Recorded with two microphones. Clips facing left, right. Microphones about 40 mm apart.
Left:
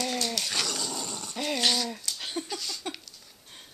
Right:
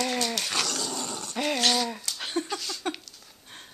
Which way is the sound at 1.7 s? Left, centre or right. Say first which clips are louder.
Right 3 dB; centre.